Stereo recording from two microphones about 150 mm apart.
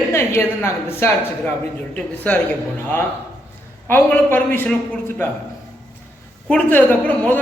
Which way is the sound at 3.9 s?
10° left (ahead or behind).